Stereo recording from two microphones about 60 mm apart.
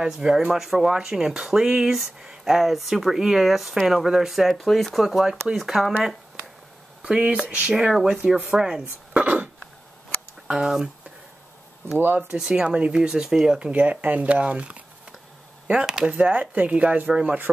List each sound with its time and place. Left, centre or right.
0.0 s speech: centre
7.0 s speech: centre
9.1 s a sound: right
10.5 s speech: centre
12.0 s speech: right
12.4 s speech: centre
13.7 s speech: right